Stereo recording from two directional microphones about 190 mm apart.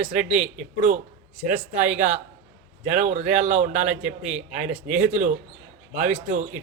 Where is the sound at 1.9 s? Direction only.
35° right (ahead or behind).